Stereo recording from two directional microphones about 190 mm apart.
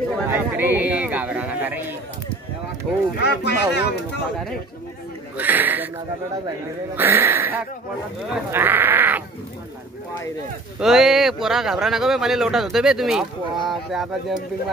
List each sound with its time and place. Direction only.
0.3 s a sound: 10° right (ahead or behind)
3.2 s speech: 60° left (ahead or behind)
5.4 s speech: 10° right (ahead or behind)
7.0 s speech: 10° right (ahead or behind)
10.8 s speech: centre (ahead or behind)